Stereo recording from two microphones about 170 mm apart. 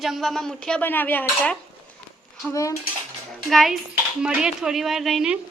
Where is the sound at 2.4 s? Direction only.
20° left (ahead or behind).